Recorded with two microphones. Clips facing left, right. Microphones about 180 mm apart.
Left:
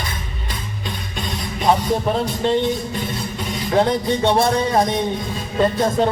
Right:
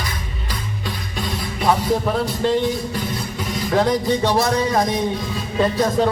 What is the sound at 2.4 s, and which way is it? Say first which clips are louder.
Music: even; 20° left (ahead or behind).